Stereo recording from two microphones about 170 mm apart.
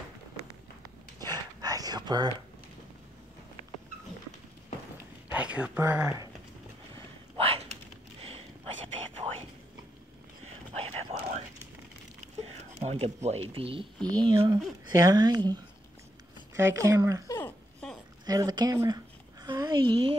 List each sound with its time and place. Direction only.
1.2 s dog: 25° right (ahead or behind)
5.3 s speech: 5° right (ahead or behind)
7.3 s a sound: 35° right (ahead or behind)
12.7 s a woman's voice: 40° right (ahead or behind); by 17.2 s 15° right (ahead or behind)
17.3 s a sound: 10° left (ahead or behind)
18.2 s a woman's voice: 20° right (ahead or behind)